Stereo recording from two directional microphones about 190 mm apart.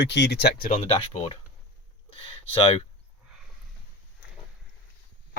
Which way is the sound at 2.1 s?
30° left (ahead or behind).